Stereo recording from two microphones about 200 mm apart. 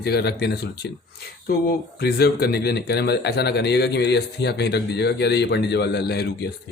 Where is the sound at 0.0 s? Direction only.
55° left (ahead or behind).